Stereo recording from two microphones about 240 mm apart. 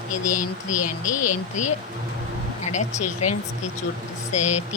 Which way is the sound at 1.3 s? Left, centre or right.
Left.